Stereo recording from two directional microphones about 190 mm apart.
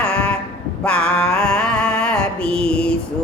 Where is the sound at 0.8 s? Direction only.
5° left (ahead or behind).